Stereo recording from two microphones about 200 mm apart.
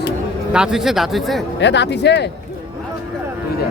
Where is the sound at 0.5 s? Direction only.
5° right (ahead or behind).